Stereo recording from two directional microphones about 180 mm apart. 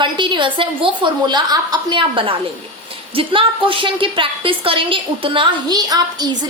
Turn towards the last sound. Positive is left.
turn(degrees=-20)  # may be behind; listen again after turning